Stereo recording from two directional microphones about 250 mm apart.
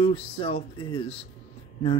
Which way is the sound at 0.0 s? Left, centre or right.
Left.